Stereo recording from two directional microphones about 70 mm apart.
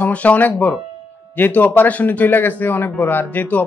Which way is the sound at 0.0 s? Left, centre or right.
Left.